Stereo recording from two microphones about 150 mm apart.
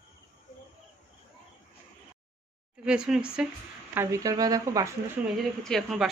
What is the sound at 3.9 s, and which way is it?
Speech, 20° right (ahead or behind).